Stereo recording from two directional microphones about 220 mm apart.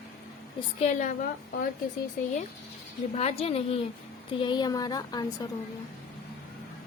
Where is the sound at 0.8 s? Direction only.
35° left (ahead or behind).